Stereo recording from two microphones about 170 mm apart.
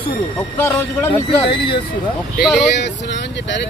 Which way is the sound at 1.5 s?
30° left (ahead or behind).